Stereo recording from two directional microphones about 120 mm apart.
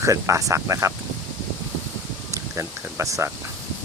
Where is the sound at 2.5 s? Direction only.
25° right (ahead or behind).